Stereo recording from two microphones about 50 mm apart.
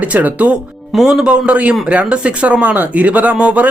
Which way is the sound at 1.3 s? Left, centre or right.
Right.